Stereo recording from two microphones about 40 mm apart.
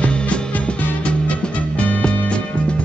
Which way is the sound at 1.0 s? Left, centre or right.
Left.